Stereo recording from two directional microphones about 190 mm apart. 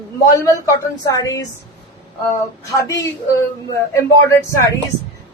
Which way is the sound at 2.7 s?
15° left (ahead or behind).